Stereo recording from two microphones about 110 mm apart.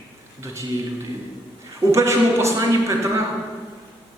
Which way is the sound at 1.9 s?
25° right (ahead or behind).